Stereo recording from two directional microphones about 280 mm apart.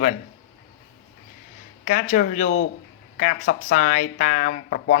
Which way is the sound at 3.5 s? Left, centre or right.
Left.